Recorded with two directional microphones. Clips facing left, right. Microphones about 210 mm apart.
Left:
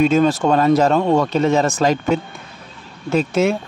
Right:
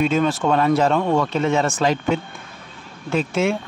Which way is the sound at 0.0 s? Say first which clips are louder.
Left 4 dB; 40° left (ahead or behind).